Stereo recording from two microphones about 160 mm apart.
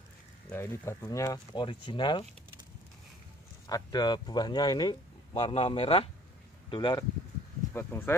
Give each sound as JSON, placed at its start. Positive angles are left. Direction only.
{"t": 0.5, "sound": "speech", "side_deg": 15}
{"t": 3.6, "sound": "speech", "side_deg": 25}
{"t": 7.7, "sound": "speech", "side_deg": 15}